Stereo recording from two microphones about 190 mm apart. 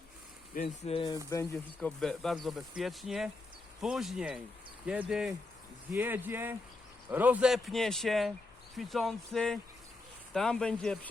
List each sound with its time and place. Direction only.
0.5 s speech: 45° left (ahead or behind)
0.9 s speech: 25° left (ahead or behind)
1.5 s speech: centre (ahead or behind)